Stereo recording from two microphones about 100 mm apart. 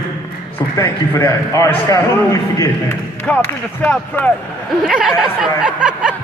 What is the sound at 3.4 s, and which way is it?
Speech, 20° left (ahead or behind).